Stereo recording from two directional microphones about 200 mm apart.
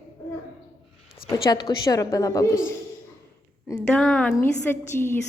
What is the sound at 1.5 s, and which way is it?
A woman's voice, 20° left (ahead or behind).